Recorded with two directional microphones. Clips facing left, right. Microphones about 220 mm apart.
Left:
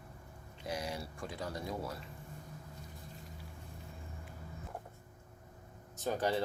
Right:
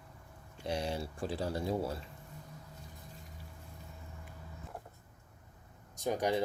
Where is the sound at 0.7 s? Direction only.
30° right (ahead or behind).